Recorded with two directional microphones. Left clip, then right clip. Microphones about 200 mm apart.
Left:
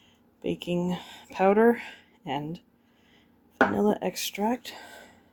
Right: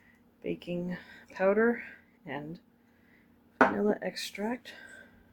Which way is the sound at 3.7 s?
40° left (ahead or behind).